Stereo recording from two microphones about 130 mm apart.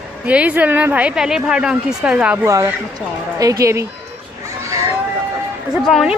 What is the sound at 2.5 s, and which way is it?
A woman's voice, 25° right (ahead or behind).